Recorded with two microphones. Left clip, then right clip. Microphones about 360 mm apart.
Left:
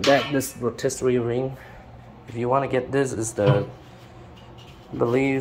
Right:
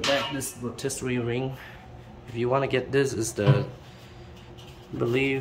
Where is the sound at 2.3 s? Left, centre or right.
Centre.